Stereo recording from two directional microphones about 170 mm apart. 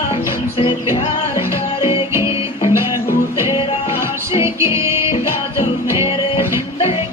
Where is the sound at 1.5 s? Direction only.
15° right (ahead or behind).